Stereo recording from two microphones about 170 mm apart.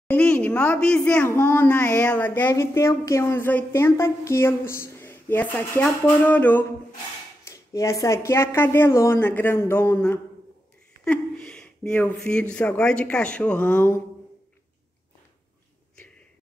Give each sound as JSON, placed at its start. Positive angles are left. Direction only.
{"t": 0.1, "sound": "speech", "side_deg": 10}